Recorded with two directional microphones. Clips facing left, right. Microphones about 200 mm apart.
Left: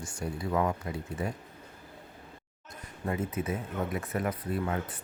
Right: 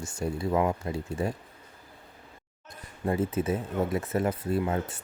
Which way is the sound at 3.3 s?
30° right (ahead or behind).